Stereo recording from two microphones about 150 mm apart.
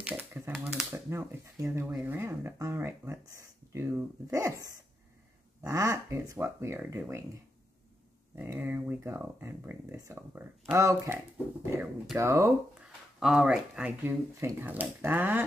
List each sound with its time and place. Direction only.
0.0 s typewriter: 10° right (ahead or behind)
0.9 s speech: 20° right (ahead or behind)
2.0 s a sound: 15° right (ahead or behind)
5.6 s speech: 20° right (ahead or behind)
8.4 s speech: 15° right (ahead or behind)
12.2 s speech: 20° right (ahead or behind)
13.2 s speech: 5° right (ahead or behind)